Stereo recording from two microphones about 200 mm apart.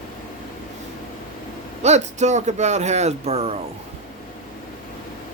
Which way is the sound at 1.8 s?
35° right (ahead or behind).